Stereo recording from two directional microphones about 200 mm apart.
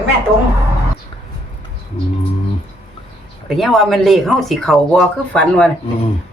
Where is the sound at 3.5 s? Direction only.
Centre (ahead or behind).